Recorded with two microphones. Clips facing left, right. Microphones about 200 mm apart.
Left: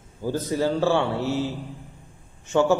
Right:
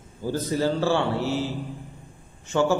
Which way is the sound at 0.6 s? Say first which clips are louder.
Left 2 dB; 20° left (ahead or behind).